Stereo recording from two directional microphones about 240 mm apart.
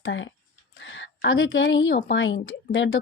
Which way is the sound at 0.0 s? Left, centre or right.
Left.